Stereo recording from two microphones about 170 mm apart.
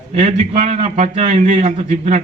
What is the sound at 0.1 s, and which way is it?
A man's voice, 40° right (ahead or behind).